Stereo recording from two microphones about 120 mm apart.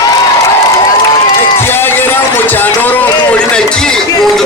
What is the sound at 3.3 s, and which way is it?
Run, 10° left (ahead or behind).